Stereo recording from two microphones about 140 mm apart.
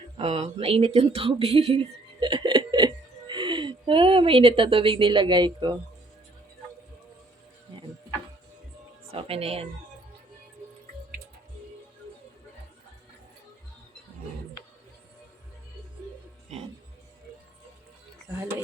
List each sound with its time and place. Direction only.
0.2 s speech: 50° right (ahead or behind); by 5.8 s 30° right (ahead or behind)
9.1 s speech: 45° right (ahead or behind)